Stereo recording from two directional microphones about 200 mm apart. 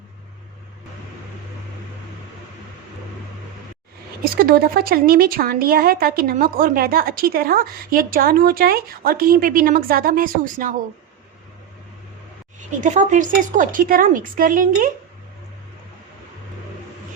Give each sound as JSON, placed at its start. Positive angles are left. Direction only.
{"t": 4.2, "sound": "a woman's voice", "side_deg": -45}
{"t": 12.5, "sound": "a woman's voice", "side_deg": -40}